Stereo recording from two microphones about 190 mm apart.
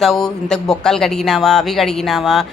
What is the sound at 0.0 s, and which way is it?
A woman's voice, centre (ahead or behind).